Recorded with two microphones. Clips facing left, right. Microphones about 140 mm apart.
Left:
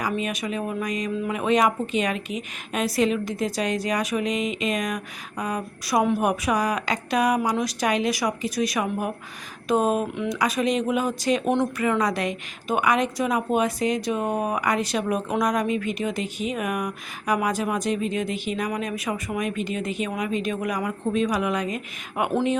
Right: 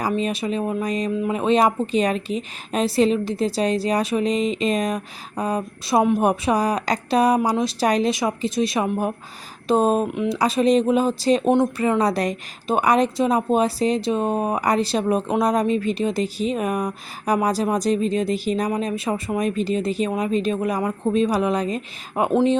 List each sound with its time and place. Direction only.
0.2 s a woman's voice: 30° right (ahead or behind)
22.3 s speech: 20° right (ahead or behind)